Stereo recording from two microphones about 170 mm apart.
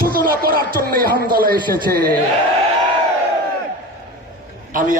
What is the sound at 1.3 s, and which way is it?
Speech, 60° right (ahead or behind).